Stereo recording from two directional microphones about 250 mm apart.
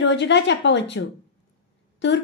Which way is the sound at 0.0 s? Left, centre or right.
Left.